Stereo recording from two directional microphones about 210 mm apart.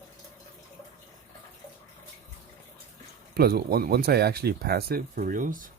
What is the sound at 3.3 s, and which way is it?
Speech, 45° right (ahead or behind).